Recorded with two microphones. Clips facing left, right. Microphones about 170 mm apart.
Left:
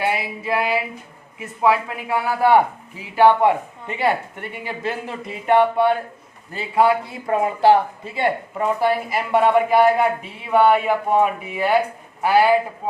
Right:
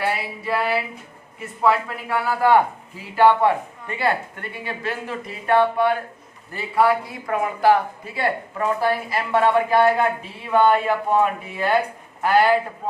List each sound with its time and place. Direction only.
0.0 s speech: 15° left (ahead or behind)